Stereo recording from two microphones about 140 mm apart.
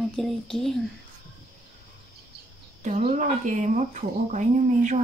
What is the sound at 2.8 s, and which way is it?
Speech, 55° right (ahead or behind).